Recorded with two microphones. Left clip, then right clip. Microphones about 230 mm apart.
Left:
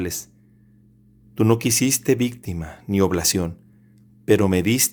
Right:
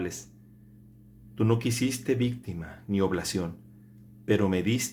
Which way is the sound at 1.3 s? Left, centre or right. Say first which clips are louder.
Left 8 dB; left.